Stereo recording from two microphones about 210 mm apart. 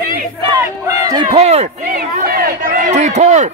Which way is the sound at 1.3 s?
30° right (ahead or behind).